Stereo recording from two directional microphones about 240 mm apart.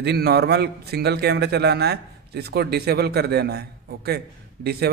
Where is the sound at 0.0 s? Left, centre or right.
Right.